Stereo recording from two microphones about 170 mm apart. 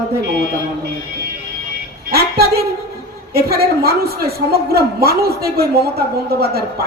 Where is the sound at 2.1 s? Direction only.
65° right (ahead or behind).